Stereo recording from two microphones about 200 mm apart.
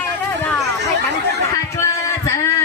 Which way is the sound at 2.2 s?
15° left (ahead or behind).